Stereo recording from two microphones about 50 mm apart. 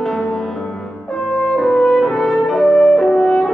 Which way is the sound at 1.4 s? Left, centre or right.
Centre.